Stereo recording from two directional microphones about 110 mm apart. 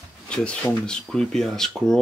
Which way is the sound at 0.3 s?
10° left (ahead or behind).